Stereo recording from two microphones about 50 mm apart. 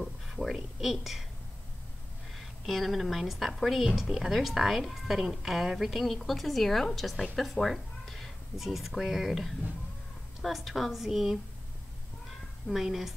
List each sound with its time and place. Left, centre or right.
0.5 s a woman's voice: centre
2.3 s a woman's voice: centre
12.8 s a woman's voice: centre